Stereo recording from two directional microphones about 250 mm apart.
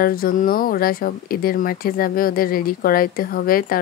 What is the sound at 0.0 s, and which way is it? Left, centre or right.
Speech, left.